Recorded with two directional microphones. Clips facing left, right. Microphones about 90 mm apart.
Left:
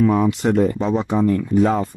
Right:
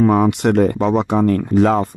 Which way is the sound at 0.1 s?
65° right (ahead or behind).